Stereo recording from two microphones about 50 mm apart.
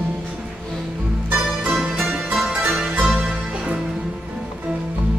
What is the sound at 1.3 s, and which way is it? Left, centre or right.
Music, right.